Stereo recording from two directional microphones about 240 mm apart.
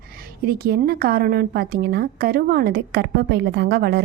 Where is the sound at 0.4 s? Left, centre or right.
Right.